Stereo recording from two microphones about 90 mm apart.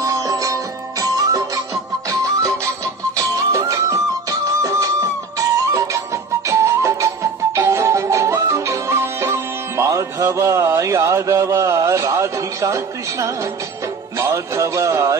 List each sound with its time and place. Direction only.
0.0 s music: 40° right (ahead or behind)
14.1 s speech: 30° right (ahead or behind)